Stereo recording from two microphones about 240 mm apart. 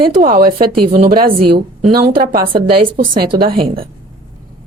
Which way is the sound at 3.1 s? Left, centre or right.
Right.